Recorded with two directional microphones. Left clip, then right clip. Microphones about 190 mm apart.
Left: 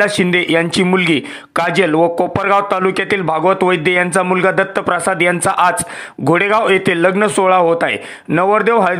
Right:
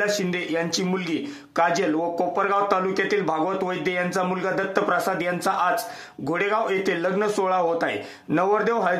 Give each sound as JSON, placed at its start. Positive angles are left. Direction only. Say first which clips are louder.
{"t": 0.0, "sound": "a man's voice", "louder": "left 11 dB", "side_deg": 40}